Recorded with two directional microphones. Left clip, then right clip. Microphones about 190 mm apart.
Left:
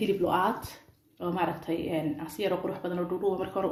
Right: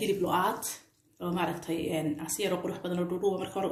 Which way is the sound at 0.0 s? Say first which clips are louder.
Left 2 dB; 20° left (ahead or behind).